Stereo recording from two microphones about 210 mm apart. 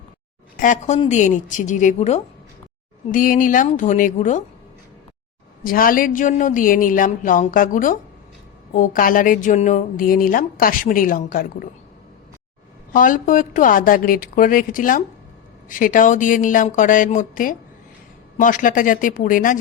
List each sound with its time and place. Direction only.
0.5 s speech: 40° left (ahead or behind)
5.6 s speech: 40° left (ahead or behind)
12.9 s speech: 40° left (ahead or behind)